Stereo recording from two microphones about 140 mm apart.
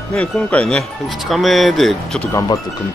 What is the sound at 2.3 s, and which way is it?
Speech, 20° left (ahead or behind).